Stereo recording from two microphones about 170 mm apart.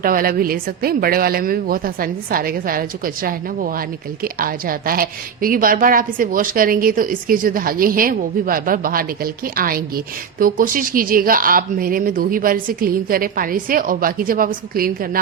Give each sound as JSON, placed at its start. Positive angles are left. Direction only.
{"t": 0.0, "sound": "a woman's voice", "side_deg": -55}